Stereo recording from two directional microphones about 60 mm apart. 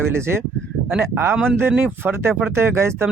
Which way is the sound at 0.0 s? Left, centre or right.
Right.